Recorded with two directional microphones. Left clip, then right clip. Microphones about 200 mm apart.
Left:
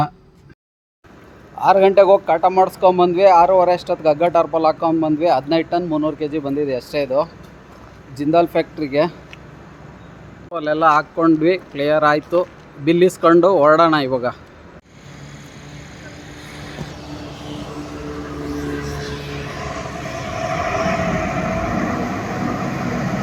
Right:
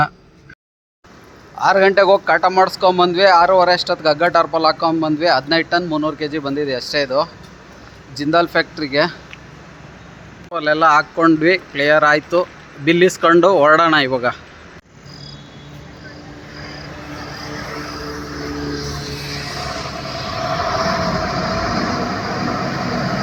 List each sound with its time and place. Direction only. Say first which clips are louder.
1.5 s speech: left 1 dB; centre (ahead or behind)
10.5 s speech: right 2 dB; centre (ahead or behind)
17.4 s vehicle: right 4 dB; 15° right (ahead or behind)
19.1 s vehicle: right 2 dB; 35° left (ahead or behind)
20.4 s vehicle: right 1 dB; 10° left (ahead or behind)